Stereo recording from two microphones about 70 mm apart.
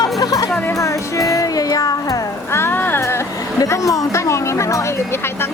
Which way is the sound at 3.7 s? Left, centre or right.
Left.